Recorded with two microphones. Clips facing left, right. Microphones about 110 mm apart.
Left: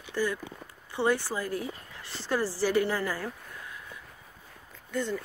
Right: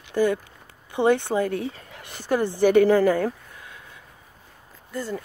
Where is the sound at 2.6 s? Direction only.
80° right.